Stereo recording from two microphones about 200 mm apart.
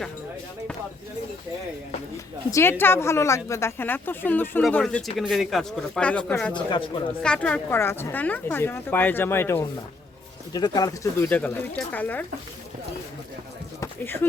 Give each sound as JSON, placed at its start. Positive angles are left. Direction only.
{"t": 2.5, "sound": "a woman's voice", "side_deg": 10}
{"t": 6.7, "sound": "speech", "side_deg": 25}
{"t": 7.2, "sound": "a woman's voice", "side_deg": 5}
{"t": 13.8, "sound": "a sound", "side_deg": 10}